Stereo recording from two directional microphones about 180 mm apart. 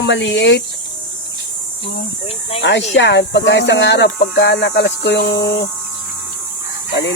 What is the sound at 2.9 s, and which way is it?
Speech, 80° left.